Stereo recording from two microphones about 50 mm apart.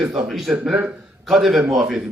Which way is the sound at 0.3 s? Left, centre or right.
Centre.